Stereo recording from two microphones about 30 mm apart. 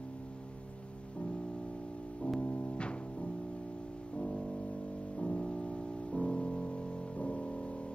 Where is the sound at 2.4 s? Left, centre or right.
Left.